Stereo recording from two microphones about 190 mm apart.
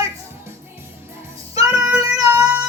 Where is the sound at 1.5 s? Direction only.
15° right (ahead or behind).